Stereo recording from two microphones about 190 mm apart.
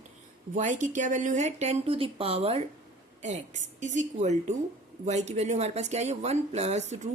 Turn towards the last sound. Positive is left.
turn(degrees=-35)  # may be behind; listen again after turning